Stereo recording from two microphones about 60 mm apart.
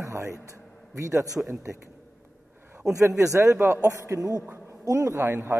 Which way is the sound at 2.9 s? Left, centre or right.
Right.